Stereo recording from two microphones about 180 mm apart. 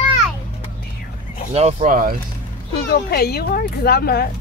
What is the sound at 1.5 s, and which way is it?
Speech, 40° right (ahead or behind).